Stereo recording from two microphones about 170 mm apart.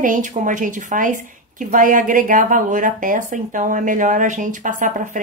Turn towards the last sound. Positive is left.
turn(degrees=-50)  # may be behind; listen again after turning